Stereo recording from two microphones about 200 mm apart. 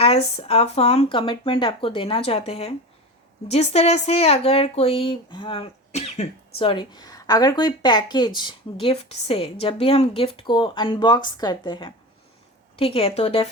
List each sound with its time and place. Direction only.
0.0 s speech: 30° left (ahead or behind)